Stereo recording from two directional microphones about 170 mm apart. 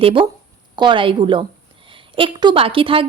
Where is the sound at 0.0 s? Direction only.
30° right (ahead or behind).